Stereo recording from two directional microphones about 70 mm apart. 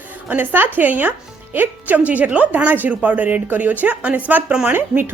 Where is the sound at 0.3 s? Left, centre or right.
Right.